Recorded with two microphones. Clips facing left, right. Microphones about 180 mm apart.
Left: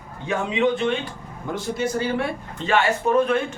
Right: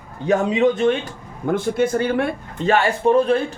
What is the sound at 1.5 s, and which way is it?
A man's voice, 55° right (ahead or behind).